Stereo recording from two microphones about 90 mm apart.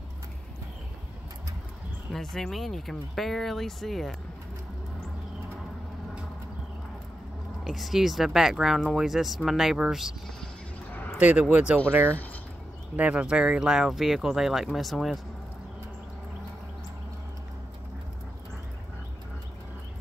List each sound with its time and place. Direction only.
2.1 s speech: 5° left (ahead or behind)
7.6 s speech: centre (ahead or behind)
11.1 s speech: 15° right (ahead or behind); by 15.1 s centre (ahead or behind)